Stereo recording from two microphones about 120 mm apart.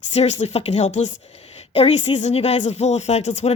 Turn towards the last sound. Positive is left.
turn(degrees=70)  # may be behind; listen again after turning